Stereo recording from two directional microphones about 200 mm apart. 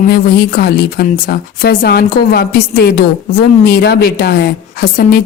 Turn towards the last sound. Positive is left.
turn(degrees=50)  # may be behind; listen again after turning